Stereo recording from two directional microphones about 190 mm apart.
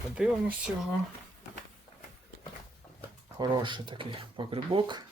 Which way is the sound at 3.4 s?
25° right (ahead or behind).